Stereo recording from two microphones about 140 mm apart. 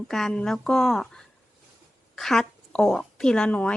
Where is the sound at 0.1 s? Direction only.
5° left (ahead or behind).